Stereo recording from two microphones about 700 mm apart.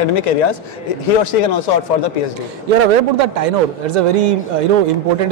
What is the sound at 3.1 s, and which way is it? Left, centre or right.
Speech, right.